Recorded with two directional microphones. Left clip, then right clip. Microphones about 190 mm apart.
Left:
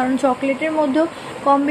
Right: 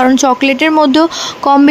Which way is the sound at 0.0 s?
45° right (ahead or behind).